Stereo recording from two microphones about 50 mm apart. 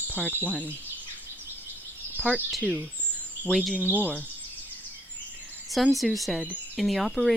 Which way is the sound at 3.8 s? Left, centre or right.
Right.